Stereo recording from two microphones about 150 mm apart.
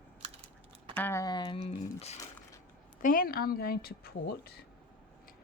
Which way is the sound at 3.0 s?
70° left (ahead or behind).